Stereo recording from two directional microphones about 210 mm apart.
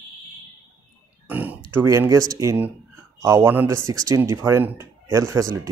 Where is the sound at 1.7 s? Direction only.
10° right (ahead or behind).